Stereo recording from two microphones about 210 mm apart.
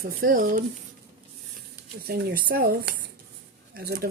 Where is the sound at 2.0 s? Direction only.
45° right (ahead or behind).